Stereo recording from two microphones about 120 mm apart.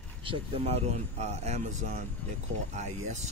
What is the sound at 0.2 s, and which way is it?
Speech, 50° right (ahead or behind).